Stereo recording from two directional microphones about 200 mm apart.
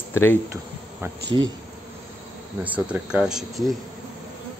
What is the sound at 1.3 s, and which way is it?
Speech, 20° right (ahead or behind).